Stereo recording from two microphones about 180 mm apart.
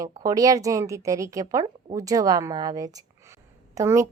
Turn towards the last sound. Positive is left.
turn(degrees=-15)  # may be behind; listen again after turning